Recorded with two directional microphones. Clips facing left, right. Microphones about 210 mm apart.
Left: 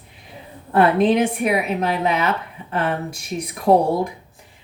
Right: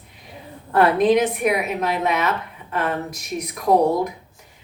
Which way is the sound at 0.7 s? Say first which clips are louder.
Even; 30° left (ahead or behind).